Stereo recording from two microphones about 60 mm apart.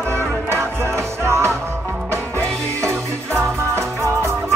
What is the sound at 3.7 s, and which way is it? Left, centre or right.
Music, right.